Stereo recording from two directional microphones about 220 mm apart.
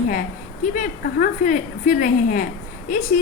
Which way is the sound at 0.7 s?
40° left (ahead or behind).